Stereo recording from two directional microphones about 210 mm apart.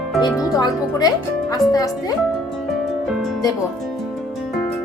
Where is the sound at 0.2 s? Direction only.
20° left (ahead or behind).